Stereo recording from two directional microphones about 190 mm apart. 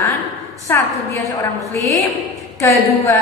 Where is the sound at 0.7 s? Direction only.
10° left (ahead or behind).